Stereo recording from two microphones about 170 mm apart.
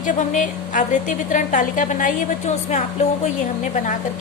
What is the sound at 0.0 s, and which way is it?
A woman's voice, 45° left (ahead or behind).